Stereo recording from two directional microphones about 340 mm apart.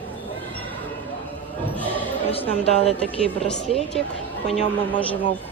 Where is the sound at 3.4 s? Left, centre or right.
Centre.